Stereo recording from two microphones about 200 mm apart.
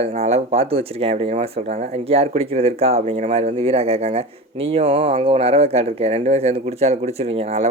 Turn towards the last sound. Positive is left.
turn(degrees=-30)  # may be behind; listen again after turning